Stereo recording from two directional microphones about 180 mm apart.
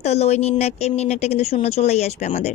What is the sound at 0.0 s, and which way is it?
A woman's voice, 35° left (ahead or behind).